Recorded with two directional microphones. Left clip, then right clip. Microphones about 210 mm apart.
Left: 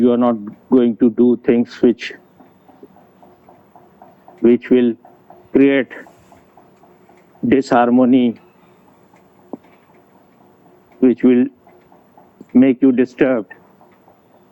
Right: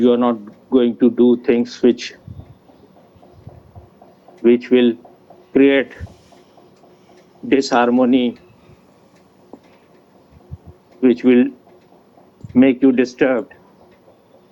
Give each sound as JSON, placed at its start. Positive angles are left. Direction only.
{"t": 0.0, "sound": "speech", "side_deg": 45}
{"t": 4.4, "sound": "speech", "side_deg": 45}
{"t": 7.4, "sound": "speech", "side_deg": 45}
{"t": 11.0, "sound": "speech", "side_deg": 45}
{"t": 12.5, "sound": "speech", "side_deg": 45}